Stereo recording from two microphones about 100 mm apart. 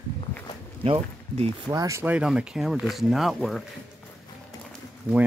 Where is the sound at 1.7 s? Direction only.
30° right (ahead or behind).